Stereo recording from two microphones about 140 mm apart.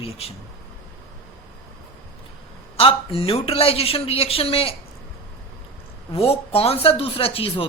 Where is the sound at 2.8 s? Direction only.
40° left (ahead or behind).